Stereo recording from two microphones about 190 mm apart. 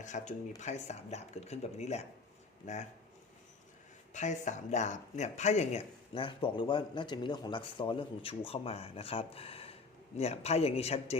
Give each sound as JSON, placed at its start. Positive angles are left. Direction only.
{"t": 0.0, "sound": "speech", "side_deg": 40}
{"t": 4.1, "sound": "speech", "side_deg": 40}